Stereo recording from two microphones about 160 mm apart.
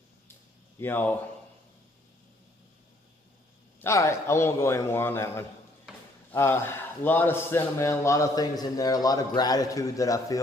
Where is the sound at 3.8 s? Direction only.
15° left (ahead or behind).